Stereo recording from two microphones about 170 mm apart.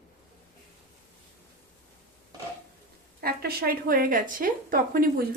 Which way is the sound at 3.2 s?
65° right (ahead or behind).